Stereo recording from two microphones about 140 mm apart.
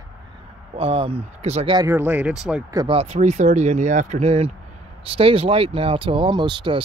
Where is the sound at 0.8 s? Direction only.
40° right (ahead or behind).